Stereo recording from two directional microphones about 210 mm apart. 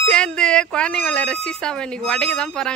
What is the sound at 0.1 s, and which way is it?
Speech, 5° left (ahead or behind).